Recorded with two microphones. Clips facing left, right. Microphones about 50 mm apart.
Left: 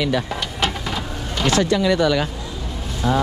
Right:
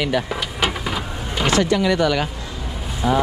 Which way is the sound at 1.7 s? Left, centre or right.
Right.